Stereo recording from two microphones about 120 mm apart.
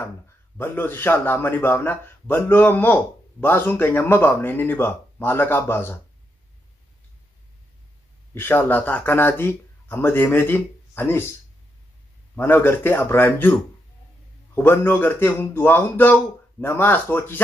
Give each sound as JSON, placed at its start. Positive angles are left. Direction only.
{"t": 0.6, "sound": "a man's voice", "side_deg": 15}
{"t": 8.4, "sound": "a man's voice", "side_deg": 15}
{"t": 12.4, "sound": "a man's voice", "side_deg": 15}